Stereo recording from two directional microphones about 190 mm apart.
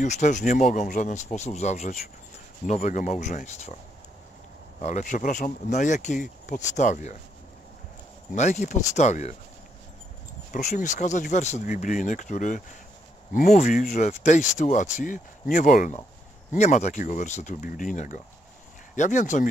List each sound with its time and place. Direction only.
0.0 s speech: 40° left (ahead or behind)
4.7 s speech: 40° left (ahead or behind)
8.4 s speech: 40° left (ahead or behind)
10.5 s speech: 40° left (ahead or behind)